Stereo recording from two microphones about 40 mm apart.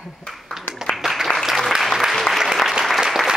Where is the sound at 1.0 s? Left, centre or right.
Centre.